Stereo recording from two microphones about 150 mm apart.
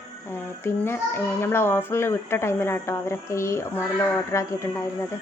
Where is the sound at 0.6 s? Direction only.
15° left (ahead or behind).